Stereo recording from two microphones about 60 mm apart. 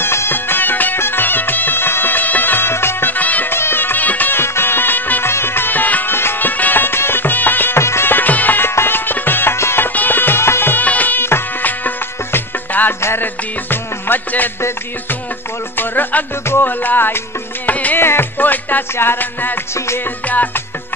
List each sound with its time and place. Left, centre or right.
0.0 s music: left
3.5 s music: left
4.4 s music: left
6.1 s music: left
6.5 s music: left
9.9 s music: left
15.8 s music: left